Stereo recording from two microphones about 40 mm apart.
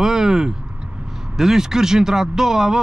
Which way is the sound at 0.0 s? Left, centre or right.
Centre.